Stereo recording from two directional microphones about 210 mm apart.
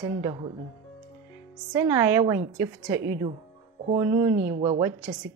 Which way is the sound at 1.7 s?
15° right (ahead or behind).